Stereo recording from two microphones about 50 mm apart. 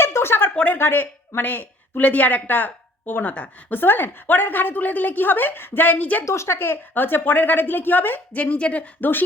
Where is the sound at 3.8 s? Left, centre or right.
Left.